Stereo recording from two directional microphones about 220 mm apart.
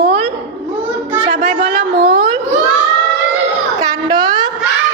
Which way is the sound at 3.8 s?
15° right (ahead or behind).